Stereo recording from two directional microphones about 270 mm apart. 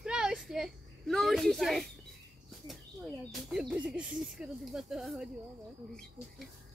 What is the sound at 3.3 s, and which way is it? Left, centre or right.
Speech, centre.